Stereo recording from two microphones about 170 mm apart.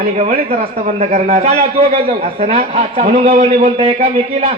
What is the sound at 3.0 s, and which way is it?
Speech, 55° right (ahead or behind).